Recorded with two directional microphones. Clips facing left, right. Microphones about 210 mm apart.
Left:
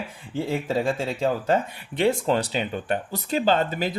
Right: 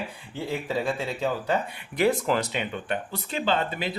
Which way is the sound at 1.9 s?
25° left (ahead or behind).